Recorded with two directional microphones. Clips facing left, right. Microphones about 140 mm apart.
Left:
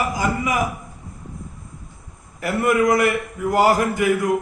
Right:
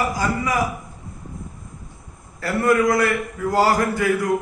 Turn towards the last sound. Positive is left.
turn(degrees=20)  # may be behind; listen again after turning